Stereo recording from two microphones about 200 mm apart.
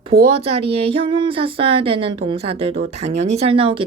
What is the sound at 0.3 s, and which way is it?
Speech, 30° right (ahead or behind).